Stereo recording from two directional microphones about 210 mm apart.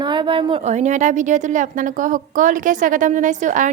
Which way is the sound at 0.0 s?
20° right (ahead or behind).